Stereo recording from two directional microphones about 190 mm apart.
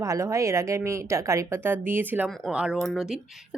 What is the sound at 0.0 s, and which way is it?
A woman's voice, 15° right (ahead or behind).